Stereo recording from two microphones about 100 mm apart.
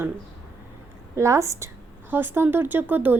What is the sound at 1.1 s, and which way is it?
Speech, 30° right (ahead or behind).